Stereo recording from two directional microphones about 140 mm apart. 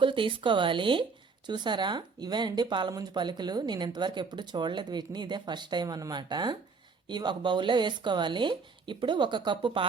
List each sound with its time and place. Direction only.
0.0 s speech: 35° right (ahead or behind)